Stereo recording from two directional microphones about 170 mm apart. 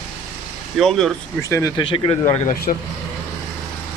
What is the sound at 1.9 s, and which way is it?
Speech, 30° left (ahead or behind).